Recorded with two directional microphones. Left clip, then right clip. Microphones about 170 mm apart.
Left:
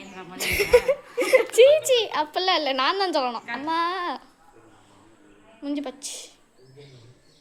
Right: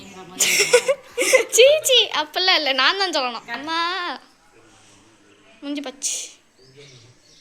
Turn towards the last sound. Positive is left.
turn(degrees=10)  # may be behind; listen again after turning